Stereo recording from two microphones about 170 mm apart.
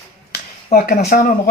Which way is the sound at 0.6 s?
55° left (ahead or behind).